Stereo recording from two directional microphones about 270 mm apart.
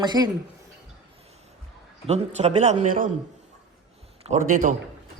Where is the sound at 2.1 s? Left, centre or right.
Right.